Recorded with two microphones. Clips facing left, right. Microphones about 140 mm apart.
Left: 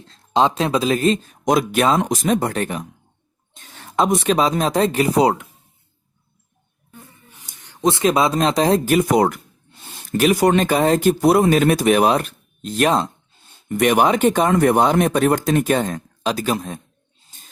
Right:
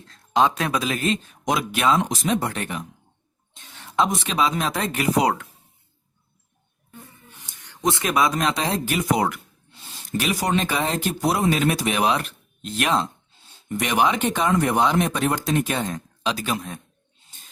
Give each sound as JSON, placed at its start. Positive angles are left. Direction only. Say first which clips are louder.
{"t": 0.0, "sound": "speech", "louder": "left 2 dB", "side_deg": 25}
{"t": 3.5, "sound": "a sound", "louder": "left 2 dB", "side_deg": 45}
{"t": 4.4, "sound": "speech", "louder": "left 6 dB", "side_deg": 40}
{"t": 7.7, "sound": "speech", "louder": "left 6 dB", "side_deg": 25}
{"t": 13.7, "sound": "speech", "louder": "left 6 dB", "side_deg": 55}